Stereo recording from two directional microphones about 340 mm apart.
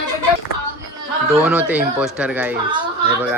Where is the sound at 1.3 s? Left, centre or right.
Centre.